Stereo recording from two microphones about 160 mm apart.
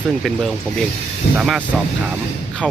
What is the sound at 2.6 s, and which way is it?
Speech, 5° left (ahead or behind).